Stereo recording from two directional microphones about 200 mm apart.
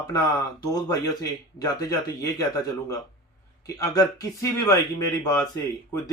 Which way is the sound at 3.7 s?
20° left (ahead or behind).